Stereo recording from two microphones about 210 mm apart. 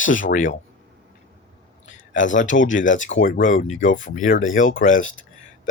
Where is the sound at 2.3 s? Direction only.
35° left (ahead or behind).